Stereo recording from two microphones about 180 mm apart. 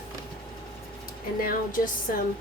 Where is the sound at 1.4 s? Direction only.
50° left (ahead or behind).